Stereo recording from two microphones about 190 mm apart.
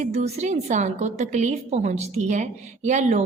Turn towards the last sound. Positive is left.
turn(degrees=-40)  # may be behind; listen again after turning